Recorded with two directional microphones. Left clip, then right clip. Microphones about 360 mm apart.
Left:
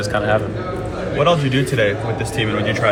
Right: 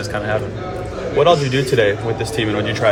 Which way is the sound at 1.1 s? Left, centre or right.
Right.